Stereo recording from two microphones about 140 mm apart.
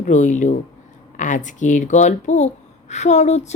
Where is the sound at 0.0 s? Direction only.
60° left (ahead or behind).